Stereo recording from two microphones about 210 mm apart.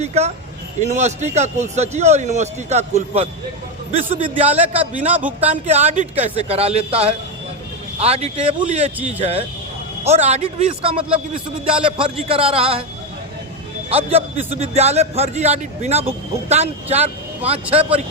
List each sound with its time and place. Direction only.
0.0 s a man's voice: 30° right (ahead or behind)
5.1 s speech: 10° right (ahead or behind)
5.6 s a man's voice: 30° right (ahead or behind)
13.9 s a man's voice: 30° right (ahead or behind)